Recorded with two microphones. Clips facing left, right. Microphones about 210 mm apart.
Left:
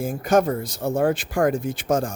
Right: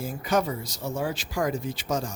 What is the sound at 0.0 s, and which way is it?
Speech, 50° left (ahead or behind).